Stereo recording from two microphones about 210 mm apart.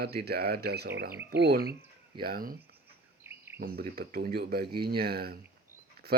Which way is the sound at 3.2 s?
10° right (ahead or behind).